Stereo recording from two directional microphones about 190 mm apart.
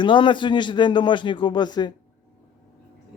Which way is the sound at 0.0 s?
25° left (ahead or behind).